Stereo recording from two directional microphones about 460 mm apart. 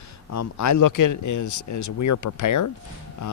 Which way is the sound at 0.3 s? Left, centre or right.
Left.